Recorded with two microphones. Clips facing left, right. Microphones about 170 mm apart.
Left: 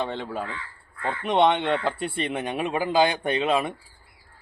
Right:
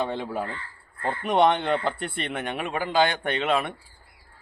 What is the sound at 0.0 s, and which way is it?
Speech, 10° right (ahead or behind).